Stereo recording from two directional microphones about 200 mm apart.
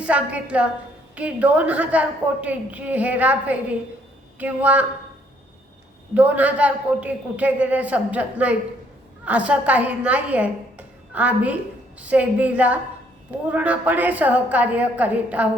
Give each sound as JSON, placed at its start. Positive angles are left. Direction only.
{"t": 0.0, "sound": "a woman's voice", "side_deg": -5}
{"t": 6.1, "sound": "a woman's voice", "side_deg": -5}